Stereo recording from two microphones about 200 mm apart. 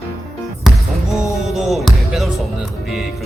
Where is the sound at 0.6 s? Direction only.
Centre (ahead or behind).